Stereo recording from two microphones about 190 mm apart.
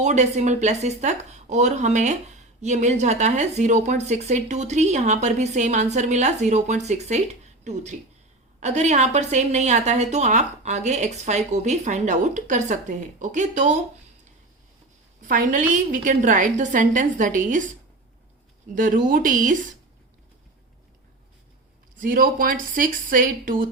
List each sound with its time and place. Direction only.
0.0 s speech: 35° right (ahead or behind)
15.3 s a woman's voice: 45° right (ahead or behind)
18.7 s a woman's voice: 45° right (ahead or behind)
21.9 s a woman's voice: 45° right (ahead or behind)